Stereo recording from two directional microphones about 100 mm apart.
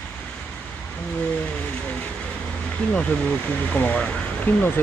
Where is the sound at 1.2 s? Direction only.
15° left (ahead or behind).